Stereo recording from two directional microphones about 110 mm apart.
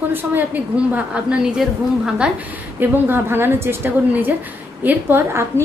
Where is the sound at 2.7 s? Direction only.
20° right (ahead or behind).